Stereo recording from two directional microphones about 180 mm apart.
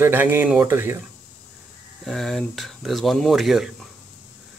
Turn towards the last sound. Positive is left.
turn(degrees=0)  # may be behind; listen again after turning